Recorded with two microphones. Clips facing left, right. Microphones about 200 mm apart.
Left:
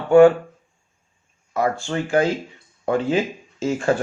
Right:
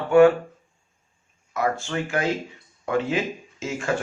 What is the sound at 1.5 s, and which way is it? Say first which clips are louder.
Speech: left 3 dB; 30° left (ahead or behind).